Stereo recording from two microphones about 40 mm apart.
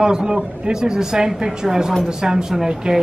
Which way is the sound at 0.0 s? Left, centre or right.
Centre.